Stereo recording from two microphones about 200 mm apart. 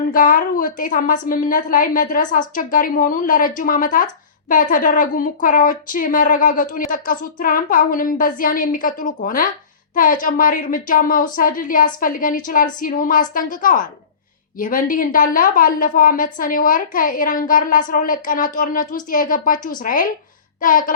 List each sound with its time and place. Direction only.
0.1 s a woman's voice: 45° left (ahead or behind)